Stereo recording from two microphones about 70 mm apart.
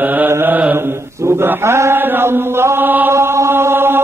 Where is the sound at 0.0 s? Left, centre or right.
Right.